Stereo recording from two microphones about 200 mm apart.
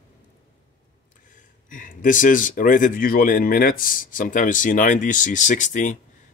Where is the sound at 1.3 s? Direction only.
40° left (ahead or behind).